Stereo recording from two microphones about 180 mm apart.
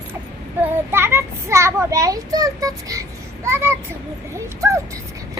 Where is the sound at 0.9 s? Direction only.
15° right (ahead or behind).